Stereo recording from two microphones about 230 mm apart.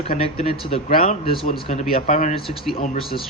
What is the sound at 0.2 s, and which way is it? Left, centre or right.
Speech, left.